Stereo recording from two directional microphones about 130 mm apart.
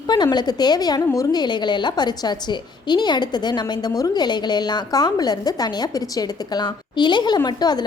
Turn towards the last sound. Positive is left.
turn(degrees=30)  # may be behind; listen again after turning